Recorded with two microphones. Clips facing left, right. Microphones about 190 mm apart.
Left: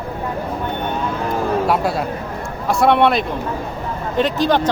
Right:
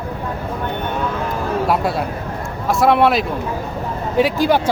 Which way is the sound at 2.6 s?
Centre (ahead or behind).